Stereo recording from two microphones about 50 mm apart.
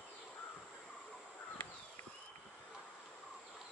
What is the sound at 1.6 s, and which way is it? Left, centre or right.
Horse, left.